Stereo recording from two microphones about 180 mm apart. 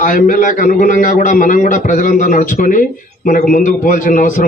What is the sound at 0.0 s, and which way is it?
A man's voice, 50° left (ahead or behind).